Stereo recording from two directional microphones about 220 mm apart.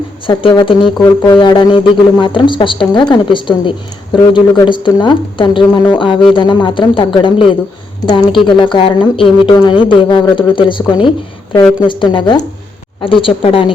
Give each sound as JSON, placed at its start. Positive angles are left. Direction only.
{"t": 0.3, "sound": "a woman's voice", "side_deg": 20}